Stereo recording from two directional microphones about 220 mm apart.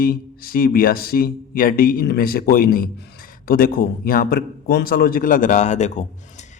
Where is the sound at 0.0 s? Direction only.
40° left (ahead or behind).